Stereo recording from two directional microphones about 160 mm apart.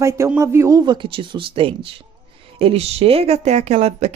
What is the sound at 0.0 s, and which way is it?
A man's voice, 15° right (ahead or behind).